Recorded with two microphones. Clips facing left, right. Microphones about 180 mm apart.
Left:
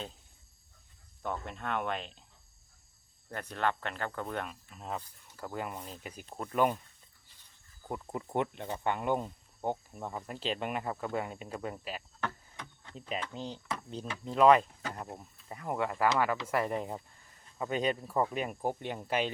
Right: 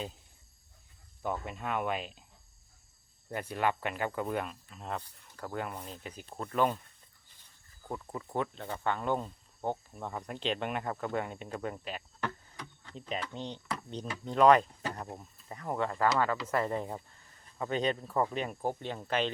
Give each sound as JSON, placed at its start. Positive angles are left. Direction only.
{"t": 1.2, "sound": "speech", "side_deg": -5}
{"t": 3.2, "sound": "speech", "side_deg": -10}
{"t": 7.9, "sound": "speech", "side_deg": 10}